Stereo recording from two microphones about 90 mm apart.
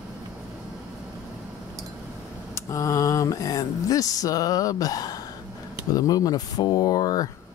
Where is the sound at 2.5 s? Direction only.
35° left (ahead or behind).